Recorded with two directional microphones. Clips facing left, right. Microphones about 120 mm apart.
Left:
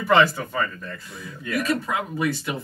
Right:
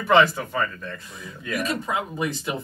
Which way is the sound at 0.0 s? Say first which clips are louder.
Even; centre (ahead or behind).